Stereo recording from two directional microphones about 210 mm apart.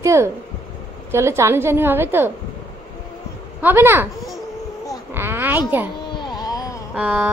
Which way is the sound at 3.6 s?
10° right (ahead or behind).